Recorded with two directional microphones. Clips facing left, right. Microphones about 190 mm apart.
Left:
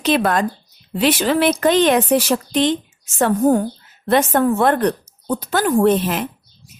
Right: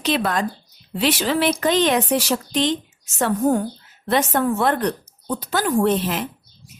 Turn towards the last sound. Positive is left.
turn(degrees=55)  # may be behind; listen again after turning